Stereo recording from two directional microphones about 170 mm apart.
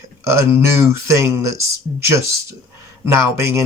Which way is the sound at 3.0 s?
15° right (ahead or behind).